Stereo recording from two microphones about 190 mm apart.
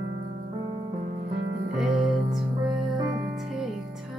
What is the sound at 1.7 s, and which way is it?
Music, centre (ahead or behind).